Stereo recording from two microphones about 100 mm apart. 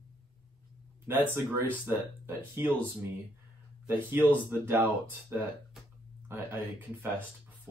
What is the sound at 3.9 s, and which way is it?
Speech, 20° right (ahead or behind).